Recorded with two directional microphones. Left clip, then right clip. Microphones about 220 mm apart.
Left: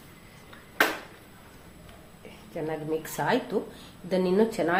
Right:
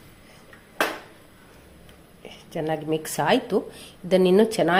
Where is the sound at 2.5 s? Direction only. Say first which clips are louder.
Right 5 dB; 45° right (ahead or behind).